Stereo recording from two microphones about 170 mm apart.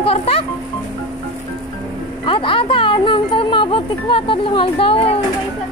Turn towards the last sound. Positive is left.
turn(degrees=35)  # may be behind; listen again after turning